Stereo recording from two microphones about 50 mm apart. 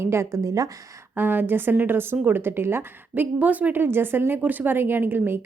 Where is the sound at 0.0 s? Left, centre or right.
Right.